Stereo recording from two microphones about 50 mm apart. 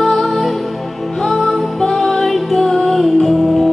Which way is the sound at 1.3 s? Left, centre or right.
Centre.